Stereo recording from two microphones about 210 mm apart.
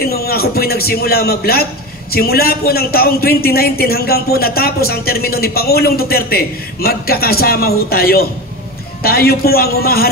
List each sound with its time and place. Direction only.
0.0 s a man's voice: 45° left (ahead or behind)